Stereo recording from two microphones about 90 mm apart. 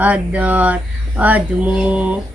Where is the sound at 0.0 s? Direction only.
15° right (ahead or behind).